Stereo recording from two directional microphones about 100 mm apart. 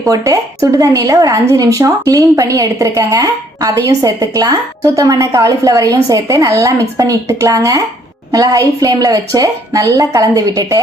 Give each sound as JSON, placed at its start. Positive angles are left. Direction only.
{"t": 0.0, "sound": "a woman's voice", "side_deg": -30}